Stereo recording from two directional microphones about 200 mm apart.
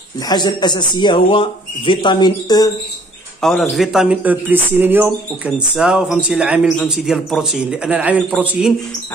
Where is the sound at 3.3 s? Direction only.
Centre (ahead or behind).